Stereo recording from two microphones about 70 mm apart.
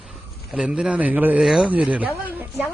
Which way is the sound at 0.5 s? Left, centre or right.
Centre.